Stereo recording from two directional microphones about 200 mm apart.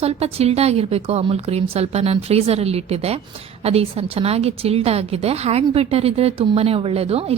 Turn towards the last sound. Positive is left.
turn(degrees=-30)  # may be behind; listen again after turning